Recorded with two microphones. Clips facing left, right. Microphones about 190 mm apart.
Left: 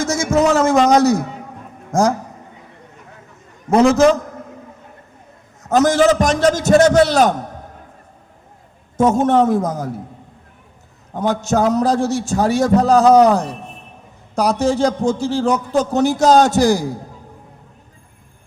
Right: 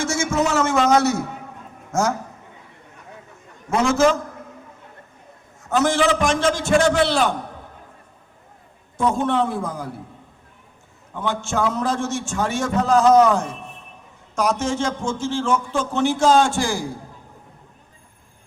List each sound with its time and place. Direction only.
0.0 s a sound: 40° left (ahead or behind)
0.9 s a man's voice: 35° left (ahead or behind)
3.7 s a man's voice: 40° left (ahead or behind)
5.6 s a man's voice: 40° left (ahead or behind)
9.0 s a man's voice: 45° left (ahead or behind)
11.1 s a man's voice: 40° left (ahead or behind)